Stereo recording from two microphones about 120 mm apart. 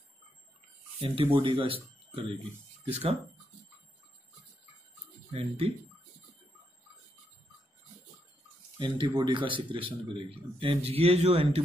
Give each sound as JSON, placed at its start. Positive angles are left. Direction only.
{"t": 1.0, "sound": "speech", "side_deg": -50}
{"t": 5.3, "sound": "speech", "side_deg": -55}
{"t": 8.7, "sound": "speech", "side_deg": -40}